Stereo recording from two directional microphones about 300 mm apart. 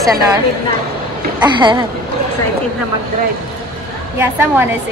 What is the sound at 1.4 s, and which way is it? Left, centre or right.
Speech, centre.